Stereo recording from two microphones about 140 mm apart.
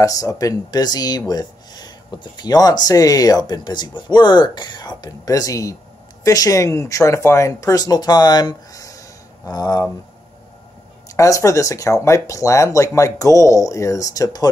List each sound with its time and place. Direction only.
0.0 s speech: 25° left (ahead or behind)
11.1 s speech: 20° left (ahead or behind)